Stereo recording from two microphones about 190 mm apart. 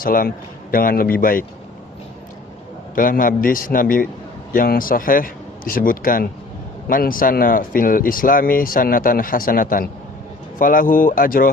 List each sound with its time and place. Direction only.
0.0 s speech: 50° left (ahead or behind)
2.9 s speech: 45° left (ahead or behind)